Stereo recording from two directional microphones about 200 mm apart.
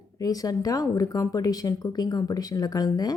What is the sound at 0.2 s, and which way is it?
A woman's voice, 20° left (ahead or behind).